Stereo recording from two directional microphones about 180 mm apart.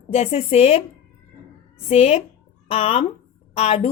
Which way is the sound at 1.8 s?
35° left (ahead or behind).